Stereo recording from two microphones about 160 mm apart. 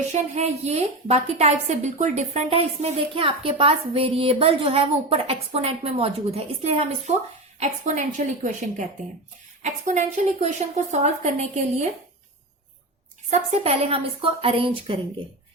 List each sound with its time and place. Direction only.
0.1 s a woman's voice: 45° right (ahead or behind)
13.3 s a woman's voice: 40° right (ahead or behind)